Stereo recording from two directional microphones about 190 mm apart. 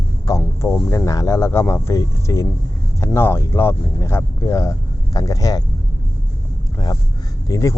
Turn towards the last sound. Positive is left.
turn(degrees=15)  # may be behind; listen again after turning